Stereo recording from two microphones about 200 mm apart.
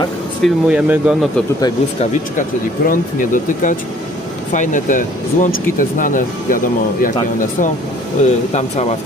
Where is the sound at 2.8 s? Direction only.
40° left (ahead or behind).